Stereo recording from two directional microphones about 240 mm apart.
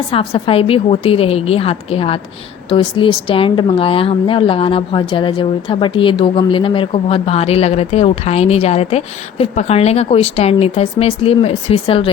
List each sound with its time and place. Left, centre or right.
0.1 s a woman's voice: left